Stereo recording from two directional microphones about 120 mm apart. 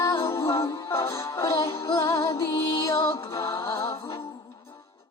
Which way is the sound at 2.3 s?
45° left (ahead or behind).